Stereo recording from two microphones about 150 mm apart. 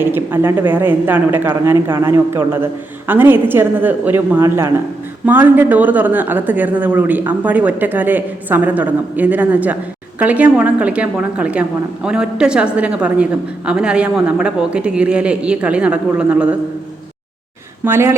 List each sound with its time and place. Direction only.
0.0 s a woman's voice: 15° right (ahead or behind)
17.8 s a woman's voice: 15° right (ahead or behind)